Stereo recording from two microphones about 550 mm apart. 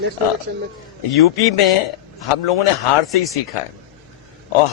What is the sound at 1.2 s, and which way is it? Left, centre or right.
Speech, left.